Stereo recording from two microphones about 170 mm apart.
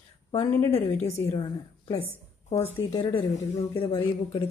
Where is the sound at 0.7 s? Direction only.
40° left (ahead or behind).